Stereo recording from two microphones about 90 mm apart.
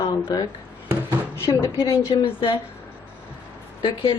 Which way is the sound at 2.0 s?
80° left.